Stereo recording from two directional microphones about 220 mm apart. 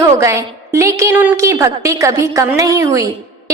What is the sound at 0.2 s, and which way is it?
A woman's voice, 15° right (ahead or behind).